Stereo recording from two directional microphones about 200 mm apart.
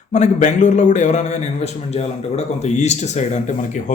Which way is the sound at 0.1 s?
35° left (ahead or behind).